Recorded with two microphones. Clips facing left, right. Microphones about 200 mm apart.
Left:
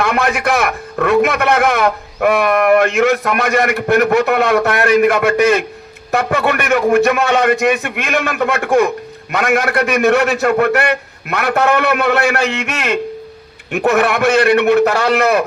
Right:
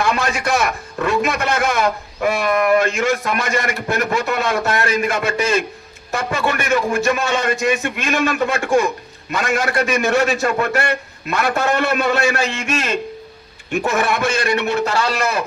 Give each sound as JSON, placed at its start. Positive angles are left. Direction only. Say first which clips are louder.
{"t": 0.0, "sound": "a man's voice", "louder": "left 4 dB", "side_deg": 60}